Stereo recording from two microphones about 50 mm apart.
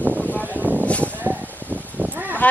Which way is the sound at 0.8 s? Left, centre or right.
Left.